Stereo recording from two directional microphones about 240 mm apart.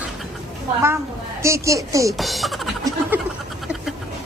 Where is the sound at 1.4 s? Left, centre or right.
Centre.